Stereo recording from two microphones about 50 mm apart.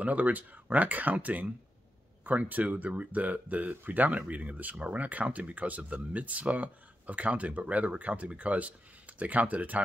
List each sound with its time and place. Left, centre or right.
0.0 s speech: right